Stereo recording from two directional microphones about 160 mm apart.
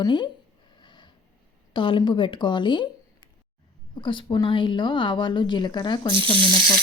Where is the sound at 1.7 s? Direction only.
30° left (ahead or behind).